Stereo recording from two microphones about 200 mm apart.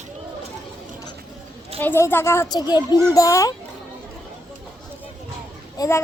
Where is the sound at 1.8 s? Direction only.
10° left (ahead or behind).